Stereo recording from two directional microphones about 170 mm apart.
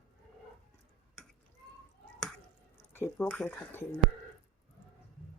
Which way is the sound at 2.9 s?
15° left (ahead or behind).